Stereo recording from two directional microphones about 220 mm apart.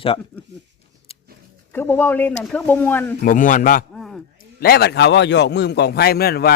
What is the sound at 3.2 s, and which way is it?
Speech, 35° left (ahead or behind).